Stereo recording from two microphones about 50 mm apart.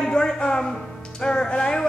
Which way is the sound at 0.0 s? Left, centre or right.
Centre.